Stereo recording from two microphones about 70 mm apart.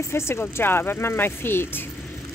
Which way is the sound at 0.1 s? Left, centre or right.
Left.